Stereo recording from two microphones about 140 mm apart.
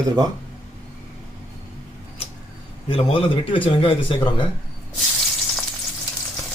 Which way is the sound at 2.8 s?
40° left (ahead or behind).